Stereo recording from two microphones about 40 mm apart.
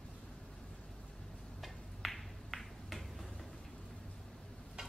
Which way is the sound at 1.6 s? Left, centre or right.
Centre.